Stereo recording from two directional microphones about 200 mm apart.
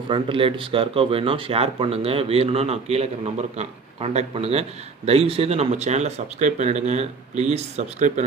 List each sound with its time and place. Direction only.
0.1 s speech: 25° right (ahead or behind)